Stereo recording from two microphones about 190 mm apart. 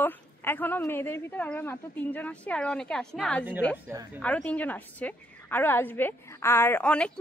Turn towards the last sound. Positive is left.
turn(degrees=5)  # may be behind; listen again after turning